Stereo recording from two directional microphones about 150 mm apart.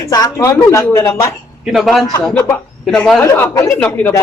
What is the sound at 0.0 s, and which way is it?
Speech, 20° left (ahead or behind).